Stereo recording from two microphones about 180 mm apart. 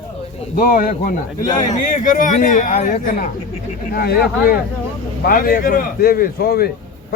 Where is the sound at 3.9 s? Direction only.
55° left (ahead or behind).